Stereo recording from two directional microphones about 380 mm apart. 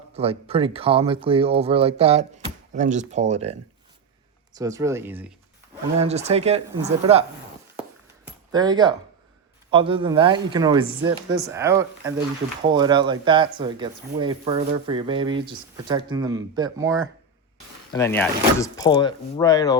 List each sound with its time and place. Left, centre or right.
0.2 s speech: centre
4.5 s speech: centre
6.0 s speech: centre
8.2 s a sound: centre
9.6 s speech: centre
17.9 s speech: centre